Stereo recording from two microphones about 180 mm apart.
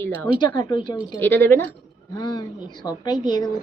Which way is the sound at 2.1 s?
25° left (ahead or behind).